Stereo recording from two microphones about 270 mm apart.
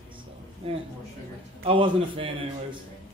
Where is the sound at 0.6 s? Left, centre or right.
Centre.